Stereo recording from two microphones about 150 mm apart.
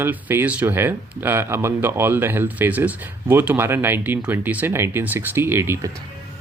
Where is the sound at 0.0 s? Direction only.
15° right (ahead or behind).